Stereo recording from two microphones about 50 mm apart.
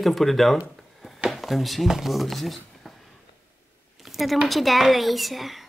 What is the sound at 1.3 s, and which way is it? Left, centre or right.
Speech, centre.